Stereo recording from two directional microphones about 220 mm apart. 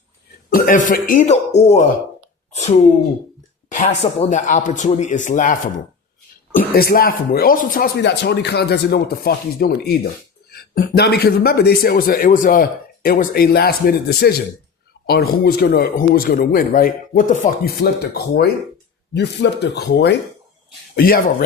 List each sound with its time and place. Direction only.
0.5 s speech: 35° left (ahead or behind)
2.5 s a sound: 30° left (ahead or behind)
3.7 s speech: 35° left (ahead or behind)
6.7 s a man's voice: 45° left (ahead or behind)